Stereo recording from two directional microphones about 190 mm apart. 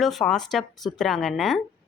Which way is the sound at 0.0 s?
Centre (ahead or behind).